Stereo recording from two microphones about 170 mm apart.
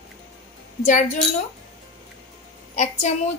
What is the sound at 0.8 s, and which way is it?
Speech, 45° left (ahead or behind).